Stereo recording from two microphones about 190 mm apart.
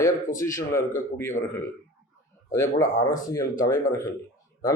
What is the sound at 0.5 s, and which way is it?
Speech, 15° left (ahead or behind).